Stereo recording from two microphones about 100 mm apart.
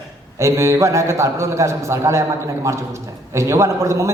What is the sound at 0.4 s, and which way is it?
A man's voice, 25° right (ahead or behind).